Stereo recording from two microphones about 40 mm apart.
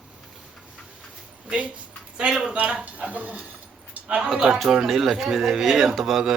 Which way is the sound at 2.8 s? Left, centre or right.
Right.